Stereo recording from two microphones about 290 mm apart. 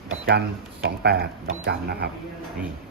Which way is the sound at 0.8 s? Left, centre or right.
Right.